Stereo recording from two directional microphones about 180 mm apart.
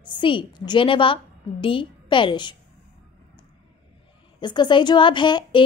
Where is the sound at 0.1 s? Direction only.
25° left (ahead or behind).